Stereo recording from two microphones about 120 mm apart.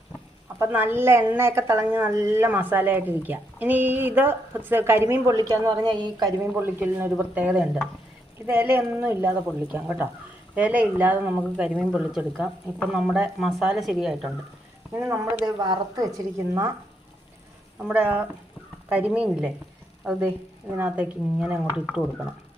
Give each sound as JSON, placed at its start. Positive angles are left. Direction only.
{"t": 0.6, "sound": "a woman's voice", "side_deg": -15}
{"t": 5.8, "sound": "a sound", "side_deg": -40}
{"t": 6.4, "sound": "speech", "side_deg": -15}
{"t": 14.9, "sound": "a woman's voice", "side_deg": -25}
{"t": 17.8, "sound": "speech", "side_deg": -10}
{"t": 20.7, "sound": "speech", "side_deg": -15}